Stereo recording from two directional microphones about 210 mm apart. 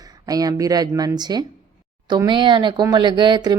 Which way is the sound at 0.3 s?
15° right (ahead or behind).